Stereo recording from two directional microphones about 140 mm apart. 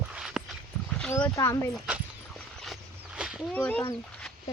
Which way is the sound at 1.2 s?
25° left (ahead or behind).